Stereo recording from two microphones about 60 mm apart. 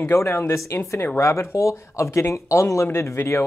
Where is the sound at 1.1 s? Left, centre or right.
Left.